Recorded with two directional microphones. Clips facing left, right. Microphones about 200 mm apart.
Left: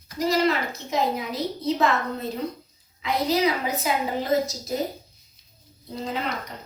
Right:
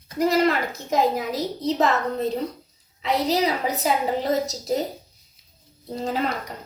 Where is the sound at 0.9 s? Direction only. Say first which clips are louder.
Right 4 dB; 45° right (ahead or behind).